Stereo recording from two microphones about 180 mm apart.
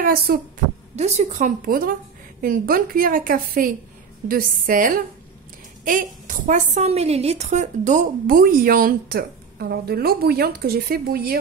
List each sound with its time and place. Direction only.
0.0 s speech: 55° right (ahead or behind)
0.9 s a woman's voice: 35° right (ahead or behind); by 11.3 s 55° right (ahead or behind)